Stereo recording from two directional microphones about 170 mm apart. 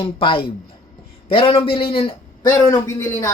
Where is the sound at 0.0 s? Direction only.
30° left (ahead or behind).